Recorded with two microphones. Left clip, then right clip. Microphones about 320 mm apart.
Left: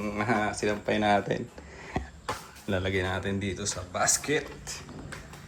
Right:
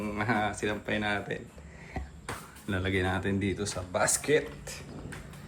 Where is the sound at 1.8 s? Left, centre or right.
Left.